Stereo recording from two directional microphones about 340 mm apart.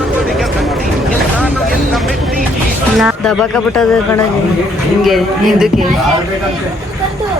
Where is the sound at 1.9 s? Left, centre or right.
Centre.